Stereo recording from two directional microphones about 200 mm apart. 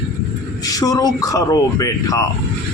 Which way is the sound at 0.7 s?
15° left (ahead or behind).